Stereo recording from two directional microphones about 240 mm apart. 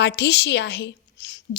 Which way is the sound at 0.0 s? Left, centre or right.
Left.